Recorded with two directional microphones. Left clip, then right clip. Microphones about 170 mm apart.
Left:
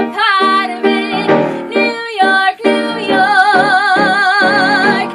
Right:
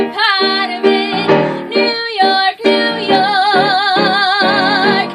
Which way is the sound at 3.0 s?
5° left (ahead or behind).